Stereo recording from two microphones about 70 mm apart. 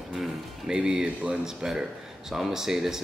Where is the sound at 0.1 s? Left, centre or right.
Centre.